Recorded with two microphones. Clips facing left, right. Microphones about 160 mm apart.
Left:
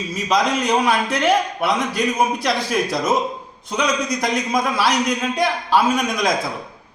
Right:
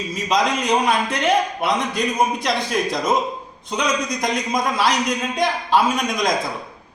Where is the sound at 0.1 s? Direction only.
Centre (ahead or behind).